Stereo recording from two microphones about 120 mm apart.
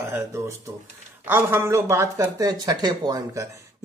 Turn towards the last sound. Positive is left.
turn(degrees=-30)  # may be behind; listen again after turning